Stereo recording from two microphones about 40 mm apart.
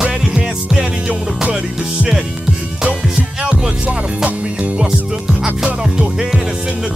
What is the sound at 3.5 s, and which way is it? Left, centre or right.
Music, right.